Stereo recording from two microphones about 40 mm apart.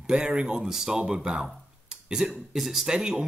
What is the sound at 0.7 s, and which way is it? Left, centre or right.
Speech, centre.